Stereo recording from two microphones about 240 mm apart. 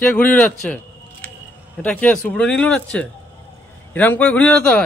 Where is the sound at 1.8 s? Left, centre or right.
Centre.